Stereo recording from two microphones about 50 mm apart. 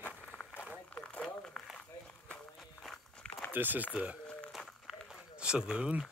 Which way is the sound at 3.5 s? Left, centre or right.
Right.